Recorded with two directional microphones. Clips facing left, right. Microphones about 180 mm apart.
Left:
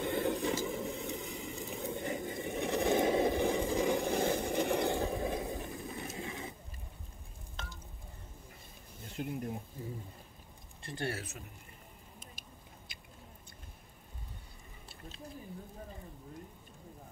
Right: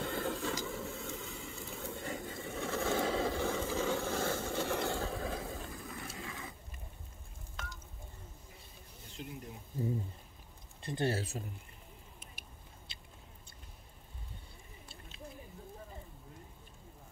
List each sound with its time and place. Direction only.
0.0 s vehicle: 20° left (ahead or behind)
7.5 s stir: 30° left (ahead or behind)
9.1 s insect: 55° left (ahead or behind)
10.8 s speech: 20° right (ahead or behind)
12.9 s a sound: 25° right (ahead or behind)